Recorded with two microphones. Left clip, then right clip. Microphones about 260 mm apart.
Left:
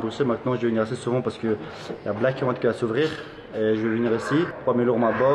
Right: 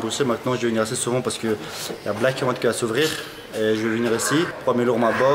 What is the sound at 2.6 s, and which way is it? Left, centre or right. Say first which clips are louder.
Speech: right 1 dB; centre.